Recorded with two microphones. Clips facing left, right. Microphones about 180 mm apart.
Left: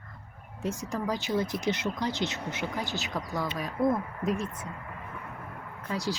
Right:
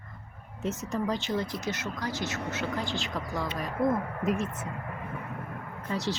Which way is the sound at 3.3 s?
Centre (ahead or behind).